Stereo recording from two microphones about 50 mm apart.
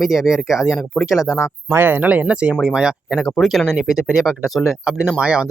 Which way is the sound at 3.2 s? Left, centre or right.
Centre.